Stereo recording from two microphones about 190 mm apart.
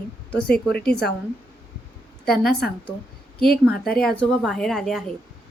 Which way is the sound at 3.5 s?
55° left (ahead or behind).